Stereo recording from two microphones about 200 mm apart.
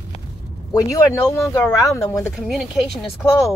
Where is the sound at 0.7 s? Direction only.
15° left (ahead or behind).